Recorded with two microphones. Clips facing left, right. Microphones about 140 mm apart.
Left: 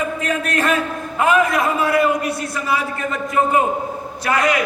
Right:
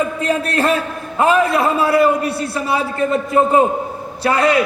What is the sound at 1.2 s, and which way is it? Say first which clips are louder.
A man's voice: right 2 dB; 30° right (ahead or behind).